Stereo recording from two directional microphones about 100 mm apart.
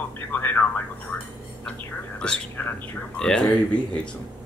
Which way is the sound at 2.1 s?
10° left (ahead or behind).